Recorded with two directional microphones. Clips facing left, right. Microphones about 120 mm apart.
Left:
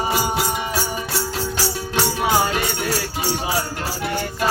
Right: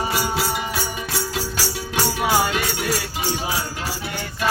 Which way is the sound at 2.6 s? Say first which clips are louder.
Left 1 dB; centre (ahead or behind).